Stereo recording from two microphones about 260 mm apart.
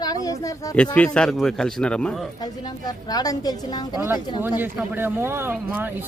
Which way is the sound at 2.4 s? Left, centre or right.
Centre.